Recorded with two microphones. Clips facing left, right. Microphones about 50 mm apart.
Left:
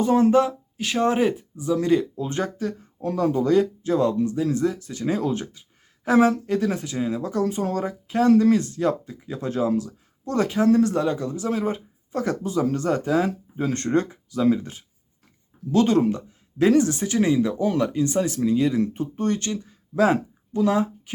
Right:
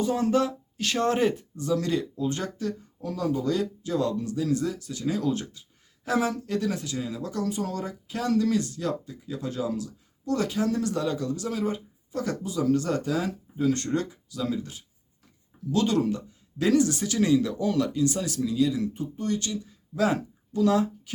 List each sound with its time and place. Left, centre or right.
0.0 s speech: left
3.0 s speech: left
20.0 s speech: left